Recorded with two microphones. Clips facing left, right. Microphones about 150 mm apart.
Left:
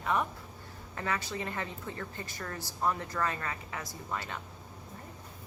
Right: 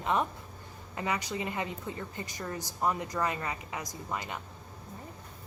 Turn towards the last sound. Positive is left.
turn(degrees=-15)  # may be behind; listen again after turning